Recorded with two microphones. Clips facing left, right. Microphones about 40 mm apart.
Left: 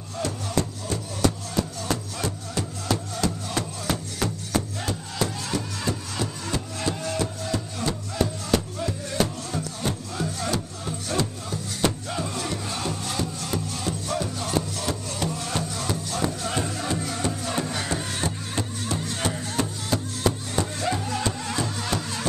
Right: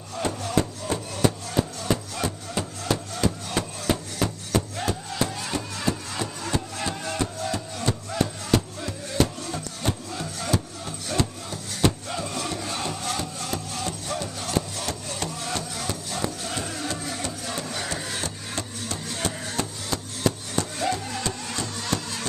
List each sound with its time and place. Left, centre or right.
0.2 s music: right; by 12.7 s centre
12.7 s music: centre
15.1 s wood: centre
15.7 s music: centre
16.3 s music: centre